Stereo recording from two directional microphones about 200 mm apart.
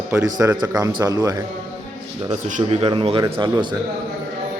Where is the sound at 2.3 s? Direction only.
30° right (ahead or behind).